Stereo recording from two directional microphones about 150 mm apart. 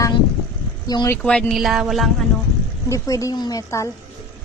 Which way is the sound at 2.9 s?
20° left (ahead or behind).